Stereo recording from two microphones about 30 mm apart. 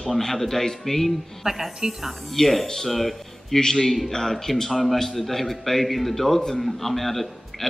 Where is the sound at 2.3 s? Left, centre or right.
Centre.